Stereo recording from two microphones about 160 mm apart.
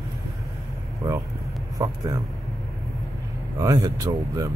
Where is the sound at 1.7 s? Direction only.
20° right (ahead or behind).